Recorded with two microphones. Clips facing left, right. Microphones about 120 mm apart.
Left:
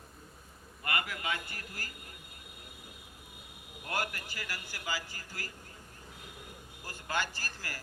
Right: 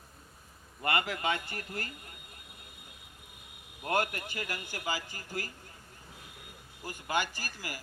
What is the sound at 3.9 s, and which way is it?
A man's voice, 25° right (ahead or behind).